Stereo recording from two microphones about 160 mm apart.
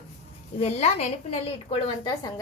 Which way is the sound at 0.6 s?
40° left (ahead or behind).